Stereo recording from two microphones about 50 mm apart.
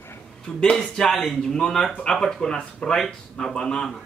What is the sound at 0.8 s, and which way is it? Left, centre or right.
A man's voice, centre.